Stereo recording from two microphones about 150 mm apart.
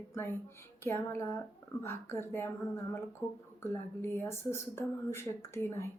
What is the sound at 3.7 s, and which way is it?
A woman's voice, 15° left (ahead or behind).